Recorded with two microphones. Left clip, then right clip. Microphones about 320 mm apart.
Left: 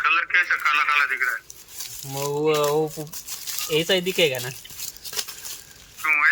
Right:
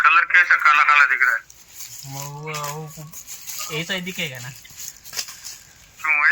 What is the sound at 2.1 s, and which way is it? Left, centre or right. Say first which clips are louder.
Speech: left 10 dB; left.